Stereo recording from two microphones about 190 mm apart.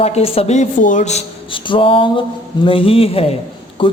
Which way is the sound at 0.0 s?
30° left (ahead or behind).